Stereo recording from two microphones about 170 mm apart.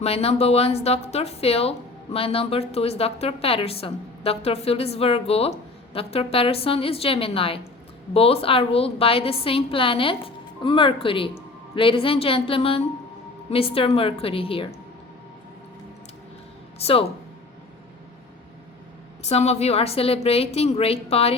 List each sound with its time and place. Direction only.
0.0 s a woman's voice: 35° left (ahead or behind)
16.7 s speech: 35° left (ahead or behind)
19.2 s a woman's voice: 40° left (ahead or behind)